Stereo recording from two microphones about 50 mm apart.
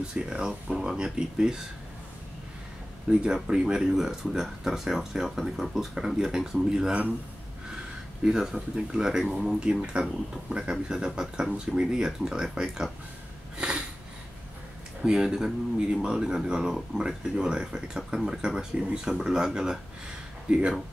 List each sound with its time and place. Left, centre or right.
0.1 s speech: centre
3.1 s speech: centre
8.2 s speech: centre
13.6 s a sound: centre
15.0 s speech: centre